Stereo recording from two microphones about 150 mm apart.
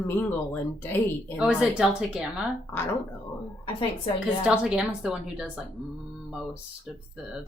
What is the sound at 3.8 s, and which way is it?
Speech, 35° left (ahead or behind).